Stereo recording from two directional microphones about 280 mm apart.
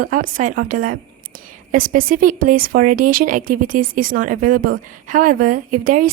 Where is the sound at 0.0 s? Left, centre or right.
Right.